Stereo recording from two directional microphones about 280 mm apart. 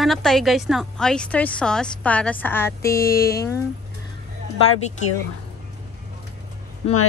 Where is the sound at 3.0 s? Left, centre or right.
Left.